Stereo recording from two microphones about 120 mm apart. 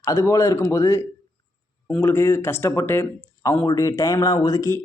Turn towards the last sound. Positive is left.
turn(degrees=25)  # may be behind; listen again after turning